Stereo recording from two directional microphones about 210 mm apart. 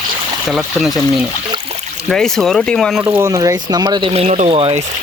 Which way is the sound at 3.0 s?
10° right (ahead or behind).